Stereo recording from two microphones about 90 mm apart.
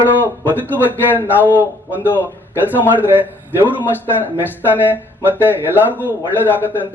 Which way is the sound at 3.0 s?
20° right (ahead or behind).